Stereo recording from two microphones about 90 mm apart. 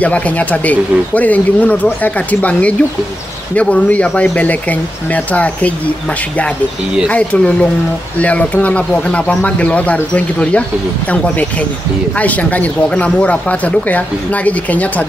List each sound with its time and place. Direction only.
0.0 s speech: 15° left (ahead or behind)